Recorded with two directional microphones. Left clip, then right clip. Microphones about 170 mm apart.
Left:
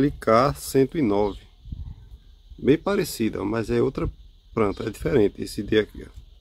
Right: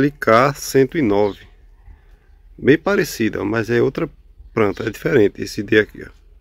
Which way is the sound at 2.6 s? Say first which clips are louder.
Right 6 dB; 15° right (ahead or behind).